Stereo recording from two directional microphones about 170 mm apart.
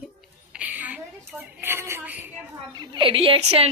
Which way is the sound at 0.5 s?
10° right (ahead or behind).